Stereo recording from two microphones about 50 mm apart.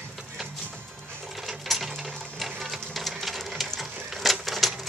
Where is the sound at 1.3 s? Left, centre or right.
Centre.